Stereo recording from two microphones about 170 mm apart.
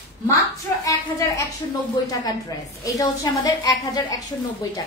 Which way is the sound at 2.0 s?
25° left (ahead or behind).